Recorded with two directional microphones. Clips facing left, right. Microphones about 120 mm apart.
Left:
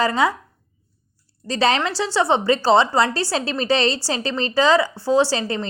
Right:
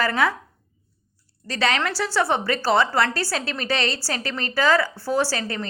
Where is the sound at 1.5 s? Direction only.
30° left (ahead or behind).